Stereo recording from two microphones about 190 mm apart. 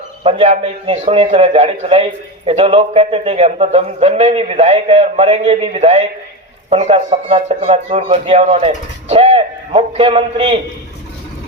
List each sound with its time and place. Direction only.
0.2 s a man's voice: 30° right (ahead or behind)